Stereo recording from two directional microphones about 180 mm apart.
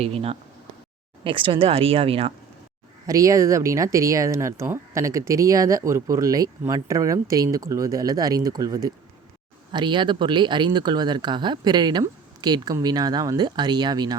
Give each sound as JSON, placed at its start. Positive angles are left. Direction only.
{"t": 0.0, "sound": "speech", "side_deg": -35}
{"t": 3.1, "sound": "speech", "side_deg": -20}